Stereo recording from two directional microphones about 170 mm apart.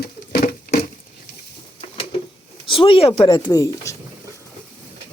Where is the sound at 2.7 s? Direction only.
35° left (ahead or behind).